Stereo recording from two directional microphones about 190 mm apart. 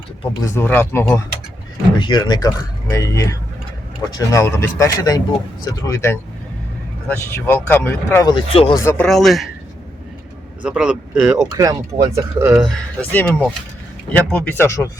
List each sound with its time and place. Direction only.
0.4 s speech: 10° left (ahead or behind)
2.0 s speech: 25° left (ahead or behind)
7.2 s speech: 10° left (ahead or behind)
9.0 s speech: centre (ahead or behind)
10.6 s speech: 5° right (ahead or behind)
12.6 s speech: 5° left (ahead or behind)